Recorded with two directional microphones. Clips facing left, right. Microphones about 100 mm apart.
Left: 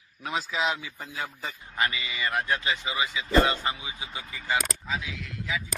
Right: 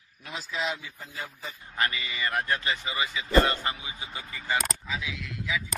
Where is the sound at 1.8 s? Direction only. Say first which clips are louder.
Left 1 dB; 5° left (ahead or behind).